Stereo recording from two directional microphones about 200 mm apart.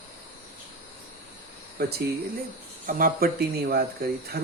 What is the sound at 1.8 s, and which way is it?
Speech, 55° right (ahead or behind).